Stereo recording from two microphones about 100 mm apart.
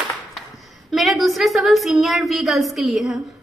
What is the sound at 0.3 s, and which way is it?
A woman's voice, centre (ahead or behind).